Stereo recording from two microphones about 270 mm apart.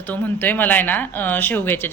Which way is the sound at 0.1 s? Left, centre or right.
Centre.